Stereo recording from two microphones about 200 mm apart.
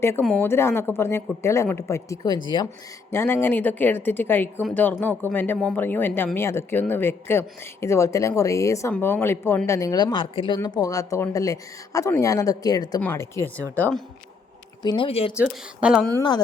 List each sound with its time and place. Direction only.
0.0 s speech: 10° left (ahead or behind)
3.1 s speech: 10° left (ahead or behind)
14.8 s speech: 20° left (ahead or behind)
15.4 s a woman's voice: 5° right (ahead or behind)
16.1 s speech: 20° left (ahead or behind)